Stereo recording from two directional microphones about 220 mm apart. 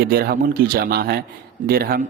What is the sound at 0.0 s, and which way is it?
A man's voice, 45° right (ahead or behind).